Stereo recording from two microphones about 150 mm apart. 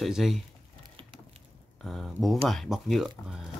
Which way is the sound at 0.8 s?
35° right (ahead or behind).